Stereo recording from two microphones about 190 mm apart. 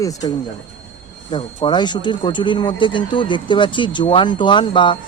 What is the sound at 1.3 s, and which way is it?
Speech, 25° left (ahead or behind).